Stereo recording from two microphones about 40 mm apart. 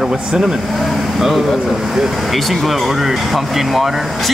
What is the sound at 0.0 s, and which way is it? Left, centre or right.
Speech, centre.